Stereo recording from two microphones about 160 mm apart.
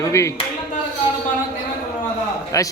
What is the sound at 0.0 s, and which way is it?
Speech, 20° left (ahead or behind).